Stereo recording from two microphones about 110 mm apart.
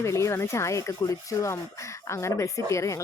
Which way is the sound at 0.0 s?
25° left (ahead or behind).